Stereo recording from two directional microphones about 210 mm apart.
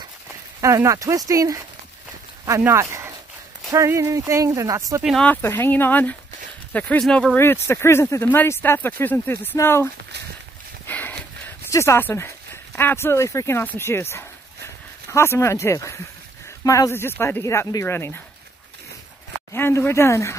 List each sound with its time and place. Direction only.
0.6 s speech: 15° right (ahead or behind)
5.0 s speech: 5° left (ahead or behind)
10.9 s a sound: 10° left (ahead or behind)
12.7 s speech: 10° left (ahead or behind)
19.5 s speech: 10° left (ahead or behind)